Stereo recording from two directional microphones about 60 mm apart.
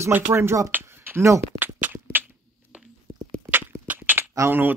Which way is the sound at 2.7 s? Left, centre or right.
Centre.